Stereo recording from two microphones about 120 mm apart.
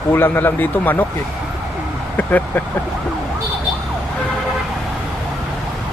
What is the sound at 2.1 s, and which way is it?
Speech, 15° left (ahead or behind).